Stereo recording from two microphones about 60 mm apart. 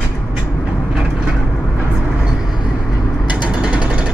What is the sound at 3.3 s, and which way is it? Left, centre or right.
Ratchet, centre.